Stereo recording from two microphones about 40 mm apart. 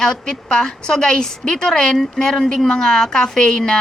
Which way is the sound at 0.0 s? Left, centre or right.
Centre.